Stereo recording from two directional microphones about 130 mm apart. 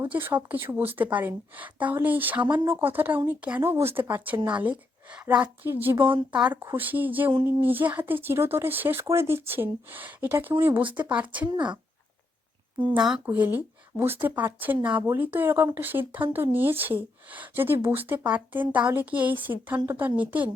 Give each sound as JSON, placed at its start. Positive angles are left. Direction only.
{"t": 0.0, "sound": "speech", "side_deg": -15}
{"t": 13.0, "sound": "speech", "side_deg": -5}
{"t": 13.2, "sound": "speech", "side_deg": -15}